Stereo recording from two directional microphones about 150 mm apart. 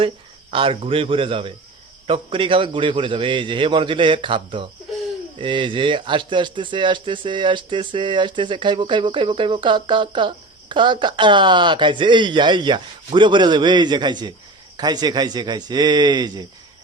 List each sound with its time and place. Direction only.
0.5 s a man's voice: 40° right (ahead or behind)